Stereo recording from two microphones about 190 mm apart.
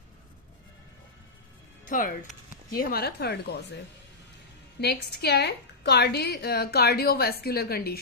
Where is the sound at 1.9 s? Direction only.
45° left (ahead or behind).